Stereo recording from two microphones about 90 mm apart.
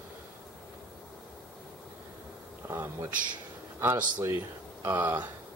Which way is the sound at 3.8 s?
25° right (ahead or behind).